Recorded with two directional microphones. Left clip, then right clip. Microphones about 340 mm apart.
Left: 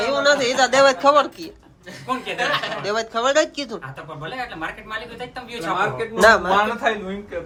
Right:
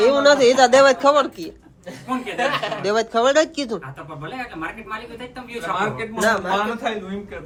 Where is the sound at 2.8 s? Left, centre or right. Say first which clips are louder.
Right 7 dB; centre.